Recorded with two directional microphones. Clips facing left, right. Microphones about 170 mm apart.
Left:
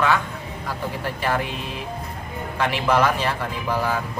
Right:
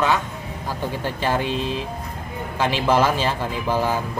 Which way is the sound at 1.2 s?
25° right (ahead or behind).